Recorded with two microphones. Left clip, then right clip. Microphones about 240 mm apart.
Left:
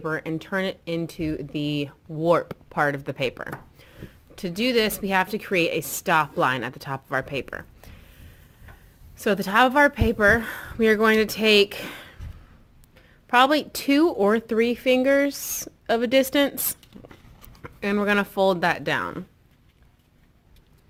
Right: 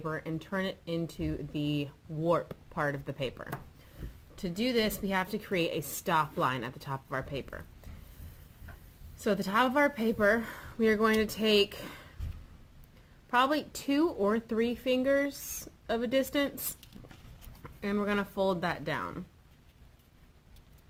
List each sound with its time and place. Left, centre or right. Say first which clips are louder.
0.0 s a woman's voice: left 9 dB; left
9.2 s a woman's voice: left 9 dB; left
13.3 s a woman's voice: left 9 dB; left
17.6 s a woman's voice: left 9 dB; left